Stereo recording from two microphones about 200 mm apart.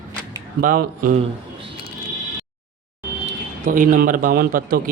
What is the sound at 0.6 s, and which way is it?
Speech, 45° right (ahead or behind).